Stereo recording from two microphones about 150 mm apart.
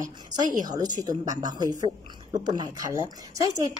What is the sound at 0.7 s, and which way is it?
Speech, 25° right (ahead or behind).